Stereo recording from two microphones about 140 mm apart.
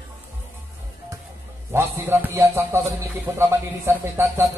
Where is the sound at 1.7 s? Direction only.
15° right (ahead or behind).